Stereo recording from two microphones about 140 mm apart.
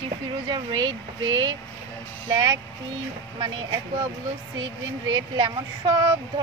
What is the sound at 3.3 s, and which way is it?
Speech, 30° right (ahead or behind).